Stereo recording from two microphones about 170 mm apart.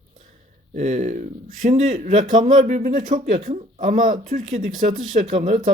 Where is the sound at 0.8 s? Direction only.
40° right (ahead or behind).